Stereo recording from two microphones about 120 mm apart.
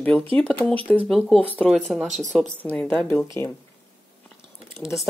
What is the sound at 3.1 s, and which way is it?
Speech, 20° left (ahead or behind).